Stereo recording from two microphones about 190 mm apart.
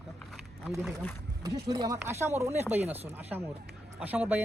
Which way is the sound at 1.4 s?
20° right (ahead or behind).